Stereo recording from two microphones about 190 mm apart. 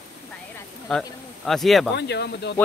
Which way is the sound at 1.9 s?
60° left (ahead or behind).